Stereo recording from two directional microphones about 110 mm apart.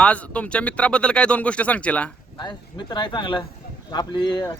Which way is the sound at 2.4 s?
45° left (ahead or behind).